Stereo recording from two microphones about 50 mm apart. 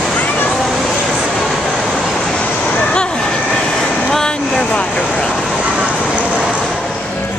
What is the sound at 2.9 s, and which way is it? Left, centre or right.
Vehicle, centre.